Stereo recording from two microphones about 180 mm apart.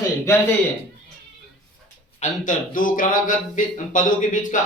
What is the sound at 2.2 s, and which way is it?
Speech, 45° left (ahead or behind).